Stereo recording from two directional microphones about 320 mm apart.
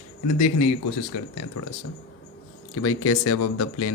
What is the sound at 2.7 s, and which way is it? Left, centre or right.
A man's voice, left.